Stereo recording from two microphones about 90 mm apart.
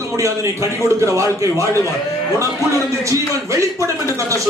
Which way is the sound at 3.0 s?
35° right (ahead or behind).